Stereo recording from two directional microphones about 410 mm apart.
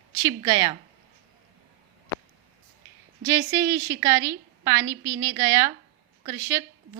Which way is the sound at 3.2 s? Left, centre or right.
Centre.